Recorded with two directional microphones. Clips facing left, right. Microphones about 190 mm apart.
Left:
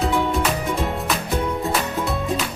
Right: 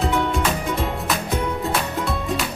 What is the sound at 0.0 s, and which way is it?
Music, centre (ahead or behind).